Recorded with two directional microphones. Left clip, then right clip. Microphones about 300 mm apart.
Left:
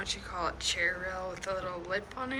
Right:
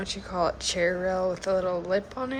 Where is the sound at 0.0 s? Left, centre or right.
Centre.